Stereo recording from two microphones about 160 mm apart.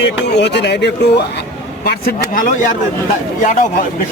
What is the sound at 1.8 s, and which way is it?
Speech, 75° left (ahead or behind).